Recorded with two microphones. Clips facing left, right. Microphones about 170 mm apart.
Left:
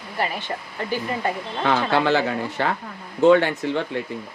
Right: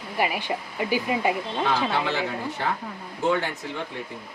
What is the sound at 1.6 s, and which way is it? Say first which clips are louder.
A man's voice: left 6 dB; 85° left.